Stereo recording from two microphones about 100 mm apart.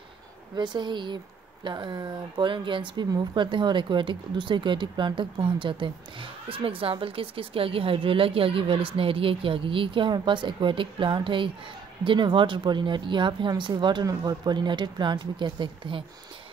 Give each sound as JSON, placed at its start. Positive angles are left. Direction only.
{"t": 0.6, "sound": "a woman's voice", "side_deg": -50}